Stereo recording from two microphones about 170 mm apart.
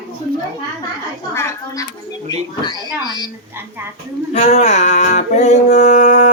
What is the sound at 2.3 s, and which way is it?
Speech, 25° left (ahead or behind).